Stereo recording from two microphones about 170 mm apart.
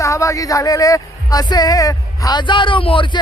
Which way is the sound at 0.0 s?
20° left (ahead or behind).